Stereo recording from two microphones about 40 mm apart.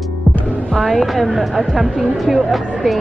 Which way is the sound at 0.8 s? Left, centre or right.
Centre.